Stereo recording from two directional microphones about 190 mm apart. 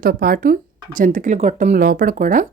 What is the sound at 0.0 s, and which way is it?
Speech, 50° right (ahead or behind).